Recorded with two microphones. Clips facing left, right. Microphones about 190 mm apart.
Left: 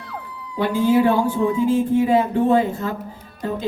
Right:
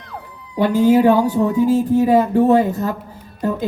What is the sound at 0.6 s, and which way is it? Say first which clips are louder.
Speech: right 4 dB; 40° right (ahead or behind).